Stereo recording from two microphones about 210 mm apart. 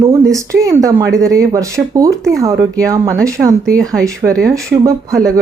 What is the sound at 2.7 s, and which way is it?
Speech, 15° right (ahead or behind).